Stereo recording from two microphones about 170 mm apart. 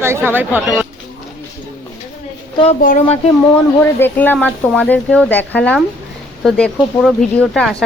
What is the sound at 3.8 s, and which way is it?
Speech, 10° left (ahead or behind).